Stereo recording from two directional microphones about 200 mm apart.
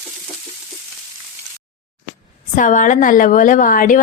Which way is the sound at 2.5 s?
40° left (ahead or behind).